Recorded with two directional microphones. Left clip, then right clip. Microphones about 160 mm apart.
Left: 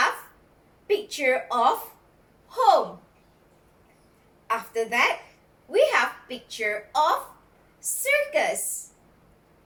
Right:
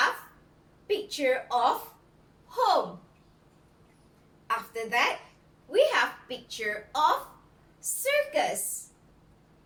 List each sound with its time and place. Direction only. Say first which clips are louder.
0.9 s a woman's voice: left 4 dB; 20° right (ahead or behind)
2.5 s gasp: left 6 dB; 20° right (ahead or behind)
4.4 s a woman's voice: left 5 dB; 20° right (ahead or behind)